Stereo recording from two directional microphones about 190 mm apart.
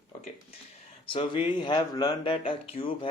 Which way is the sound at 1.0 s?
25° left (ahead or behind).